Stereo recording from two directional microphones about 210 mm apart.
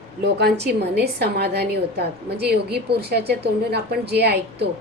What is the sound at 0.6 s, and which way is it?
A woman's voice, 50° right (ahead or behind).